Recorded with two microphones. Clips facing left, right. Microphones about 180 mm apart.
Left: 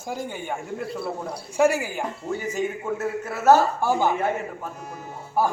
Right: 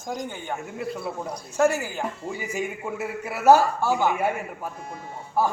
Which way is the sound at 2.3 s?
10° right (ahead or behind).